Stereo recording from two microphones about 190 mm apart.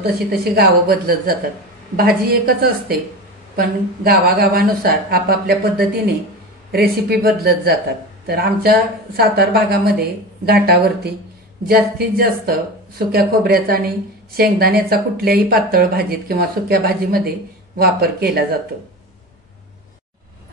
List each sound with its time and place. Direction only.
0.0 s a woman's voice: 55° right (ahead or behind)
2.4 s a woman's voice: 50° right (ahead or behind)